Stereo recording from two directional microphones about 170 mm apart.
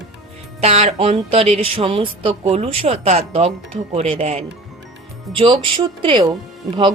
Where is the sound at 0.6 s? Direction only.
40° right (ahead or behind).